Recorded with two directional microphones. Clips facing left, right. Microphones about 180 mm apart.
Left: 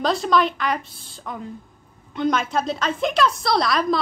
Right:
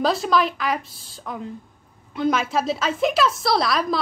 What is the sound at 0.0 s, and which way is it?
A woman's voice, centre (ahead or behind).